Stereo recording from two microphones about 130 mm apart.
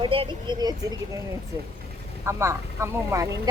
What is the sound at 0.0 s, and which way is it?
Speech, 40° right (ahead or behind).